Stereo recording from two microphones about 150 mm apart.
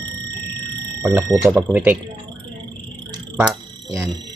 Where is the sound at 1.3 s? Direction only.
Centre (ahead or behind).